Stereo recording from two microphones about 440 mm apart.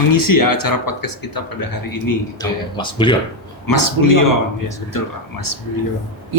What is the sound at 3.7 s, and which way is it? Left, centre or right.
Speech, left.